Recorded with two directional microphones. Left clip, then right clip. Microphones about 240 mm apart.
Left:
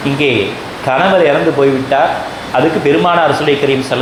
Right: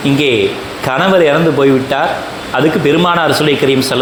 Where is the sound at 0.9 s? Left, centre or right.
Right.